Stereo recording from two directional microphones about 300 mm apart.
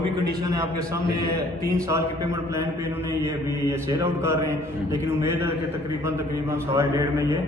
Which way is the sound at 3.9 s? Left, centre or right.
Centre.